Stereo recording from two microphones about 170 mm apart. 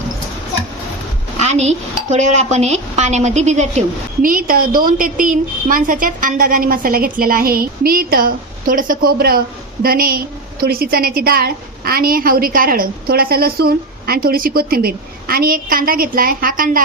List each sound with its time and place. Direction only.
1.4 s a woman's voice: 40° right (ahead or behind)